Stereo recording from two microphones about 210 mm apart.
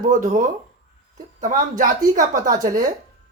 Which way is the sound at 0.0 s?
35° right (ahead or behind).